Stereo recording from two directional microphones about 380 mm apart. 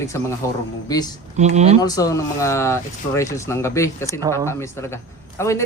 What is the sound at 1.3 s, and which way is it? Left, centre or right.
Speech, centre.